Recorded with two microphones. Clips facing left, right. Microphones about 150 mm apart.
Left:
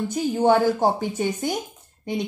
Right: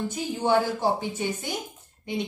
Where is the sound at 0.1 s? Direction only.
45° left (ahead or behind).